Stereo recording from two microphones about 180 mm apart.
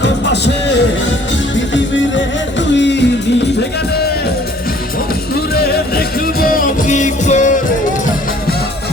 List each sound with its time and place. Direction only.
0.0 s music: 75° left (ahead or behind)
1.5 s music: 90° left
5.3 s music: 60° left (ahead or behind); by 7.6 s 45° left (ahead or behind)